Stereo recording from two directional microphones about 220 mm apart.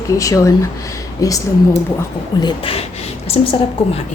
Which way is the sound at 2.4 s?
25° left (ahead or behind).